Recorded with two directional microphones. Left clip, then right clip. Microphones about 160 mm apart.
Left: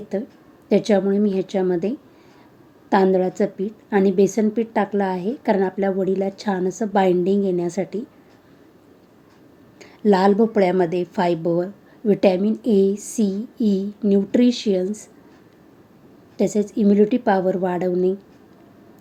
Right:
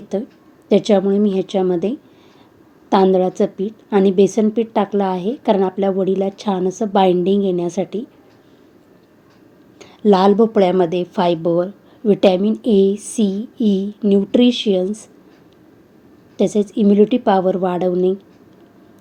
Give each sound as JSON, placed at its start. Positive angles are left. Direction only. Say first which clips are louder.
{"t": 0.7, "sound": "a woman's voice", "louder": "right 4 dB", "side_deg": -10}
{"t": 9.7, "sound": "a woman's voice", "louder": "right 4 dB", "side_deg": -15}
{"t": 16.4, "sound": "a woman's voice", "louder": "right 4 dB", "side_deg": -10}